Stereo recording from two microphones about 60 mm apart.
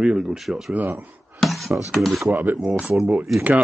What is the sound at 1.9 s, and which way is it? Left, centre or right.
Speech, centre.